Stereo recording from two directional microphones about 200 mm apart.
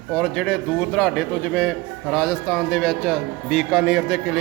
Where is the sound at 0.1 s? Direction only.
5° left (ahead or behind).